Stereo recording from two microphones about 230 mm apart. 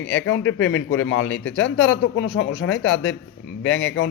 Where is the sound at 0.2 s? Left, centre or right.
Left.